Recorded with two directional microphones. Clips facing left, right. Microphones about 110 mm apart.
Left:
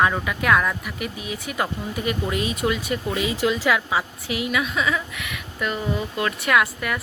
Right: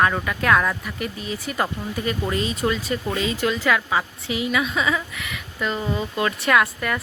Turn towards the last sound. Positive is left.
turn(degrees=5)  # may be behind; listen again after turning